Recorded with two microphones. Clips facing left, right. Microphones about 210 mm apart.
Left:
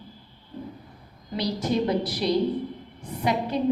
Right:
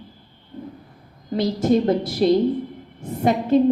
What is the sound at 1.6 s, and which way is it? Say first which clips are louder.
A woman's voice: right 6 dB; 45° right (ahead or behind).